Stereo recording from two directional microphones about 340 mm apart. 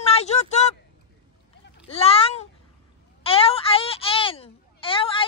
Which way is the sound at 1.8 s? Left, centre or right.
Centre.